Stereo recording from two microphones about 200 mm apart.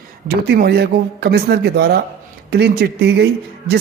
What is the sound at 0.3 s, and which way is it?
A man's voice, 50° right (ahead or behind).